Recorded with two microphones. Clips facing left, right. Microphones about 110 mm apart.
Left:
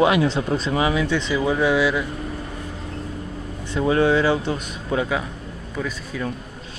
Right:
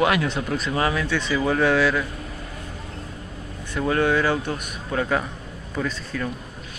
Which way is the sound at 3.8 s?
25° left (ahead or behind).